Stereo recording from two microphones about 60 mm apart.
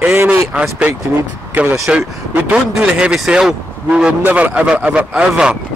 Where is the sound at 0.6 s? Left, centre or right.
Centre.